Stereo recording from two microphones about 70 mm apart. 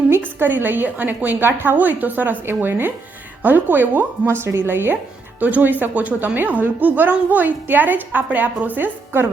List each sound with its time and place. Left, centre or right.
0.3 s a woman's voice: right